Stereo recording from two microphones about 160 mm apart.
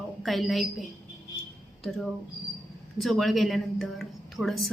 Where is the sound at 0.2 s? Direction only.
Centre (ahead or behind).